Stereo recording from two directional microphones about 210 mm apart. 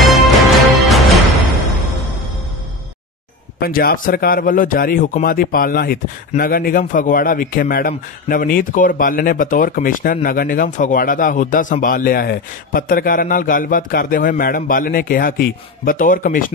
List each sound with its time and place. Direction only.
0.0 s music: centre (ahead or behind)
3.6 s speech: 45° left (ahead or behind)